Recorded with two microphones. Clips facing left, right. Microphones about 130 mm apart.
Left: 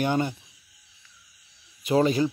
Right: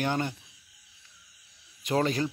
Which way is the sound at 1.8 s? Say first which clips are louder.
Left 5 dB; 5° left (ahead or behind).